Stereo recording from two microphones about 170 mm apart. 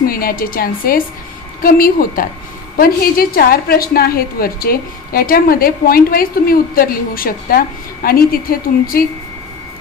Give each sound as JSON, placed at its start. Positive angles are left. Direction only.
{"t": 0.0, "sound": "a woman's voice", "side_deg": 60}